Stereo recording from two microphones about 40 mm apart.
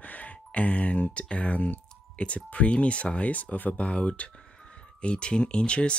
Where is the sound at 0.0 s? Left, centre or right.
Left.